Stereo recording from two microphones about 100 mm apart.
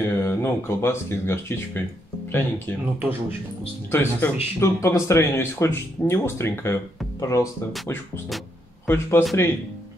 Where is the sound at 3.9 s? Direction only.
25° left (ahead or behind).